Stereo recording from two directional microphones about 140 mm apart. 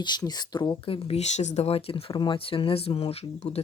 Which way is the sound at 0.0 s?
30° left (ahead or behind).